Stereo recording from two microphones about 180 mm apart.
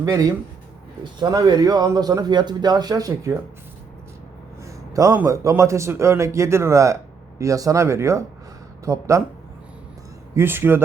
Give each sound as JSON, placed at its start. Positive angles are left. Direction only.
{"t": 0.0, "sound": "speech", "side_deg": -20}
{"t": 4.6, "sound": "a man's voice", "side_deg": -20}
{"t": 10.3, "sound": "a man's voice", "side_deg": -10}